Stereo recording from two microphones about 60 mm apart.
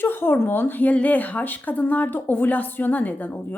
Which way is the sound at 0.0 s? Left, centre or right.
Left.